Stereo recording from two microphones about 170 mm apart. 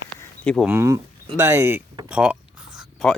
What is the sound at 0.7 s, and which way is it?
Speech, 15° right (ahead or behind).